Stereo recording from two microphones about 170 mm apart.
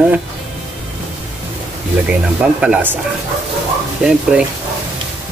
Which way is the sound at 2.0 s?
10° right (ahead or behind).